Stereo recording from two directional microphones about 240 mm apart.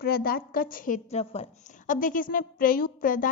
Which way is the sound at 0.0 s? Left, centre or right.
Left.